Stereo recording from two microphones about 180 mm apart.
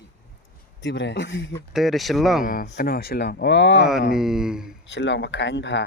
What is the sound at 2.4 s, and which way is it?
Speech, 50° left (ahead or behind).